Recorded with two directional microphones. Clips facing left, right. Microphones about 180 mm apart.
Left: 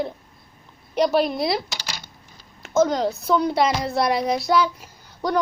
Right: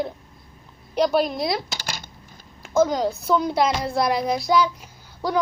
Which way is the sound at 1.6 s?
50° right (ahead or behind).